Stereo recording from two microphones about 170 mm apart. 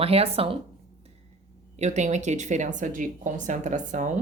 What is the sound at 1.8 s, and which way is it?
Speech, 45° right (ahead or behind).